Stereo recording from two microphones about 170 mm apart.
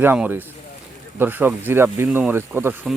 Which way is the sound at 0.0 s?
10° right (ahead or behind).